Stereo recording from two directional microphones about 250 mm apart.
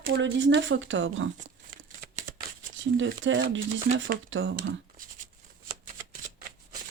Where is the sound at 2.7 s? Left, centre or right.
Right.